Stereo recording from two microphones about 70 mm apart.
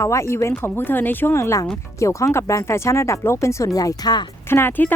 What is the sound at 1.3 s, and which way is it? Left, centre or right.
Speech, left.